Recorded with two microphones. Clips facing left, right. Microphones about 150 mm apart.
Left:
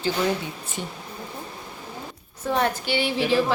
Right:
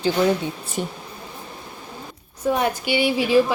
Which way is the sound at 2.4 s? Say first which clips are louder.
Right 2 dB; 10° right (ahead or behind).